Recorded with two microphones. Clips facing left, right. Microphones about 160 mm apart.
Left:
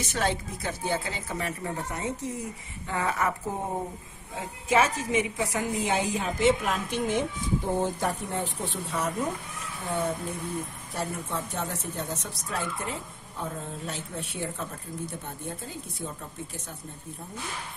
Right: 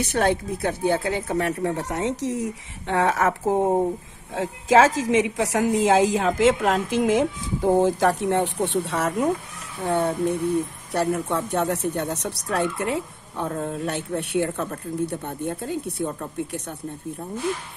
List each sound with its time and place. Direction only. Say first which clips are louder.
0.0 s a woman's voice: right 7 dB; 55° right (ahead or behind)